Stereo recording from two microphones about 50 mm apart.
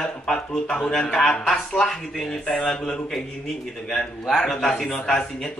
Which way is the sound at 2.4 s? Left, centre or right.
Left.